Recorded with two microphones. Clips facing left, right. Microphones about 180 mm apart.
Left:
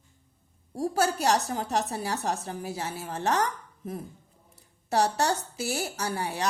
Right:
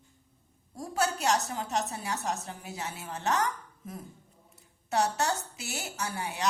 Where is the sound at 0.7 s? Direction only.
35° left (ahead or behind).